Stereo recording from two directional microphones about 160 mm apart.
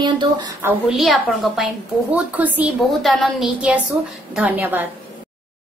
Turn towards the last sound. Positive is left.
turn(degrees=-10)  # may be behind; listen again after turning